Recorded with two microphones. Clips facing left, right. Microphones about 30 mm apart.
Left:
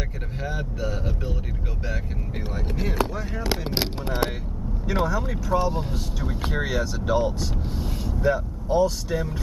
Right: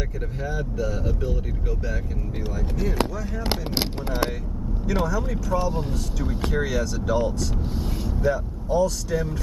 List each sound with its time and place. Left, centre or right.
0.4 s speech: left
2.5 s speech: left
5.0 s speech: left
7.7 s speech: centre
8.2 s speech: left